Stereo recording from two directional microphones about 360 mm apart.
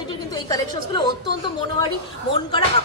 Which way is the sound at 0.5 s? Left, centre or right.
Centre.